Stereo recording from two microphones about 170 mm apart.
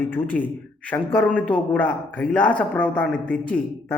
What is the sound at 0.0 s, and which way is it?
A man's voice, 10° left (ahead or behind).